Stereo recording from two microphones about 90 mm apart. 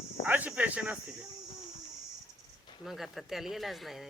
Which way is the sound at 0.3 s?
15° right (ahead or behind).